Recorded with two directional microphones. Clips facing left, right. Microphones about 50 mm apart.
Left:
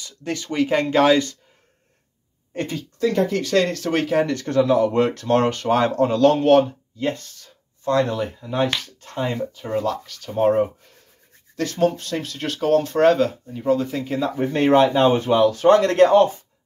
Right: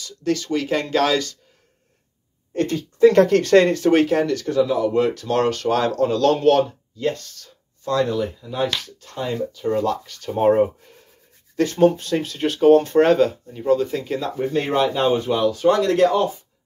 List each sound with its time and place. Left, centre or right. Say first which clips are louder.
0.0 s speech: right 5 dB; left
2.5 s speech: right 5 dB; centre
3.2 s speech: right 6 dB; right
3.6 s speech: right 6 dB; centre
4.5 s speech: left 4 dB; left
5.3 s speech: left 2 dB; left
7.9 s speech: even; left
9.8 s speech: right 1 dB; centre
14.4 s speech: left 5 dB; left